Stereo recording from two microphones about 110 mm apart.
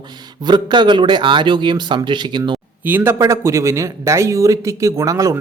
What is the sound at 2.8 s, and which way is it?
Speech, 20° right (ahead or behind).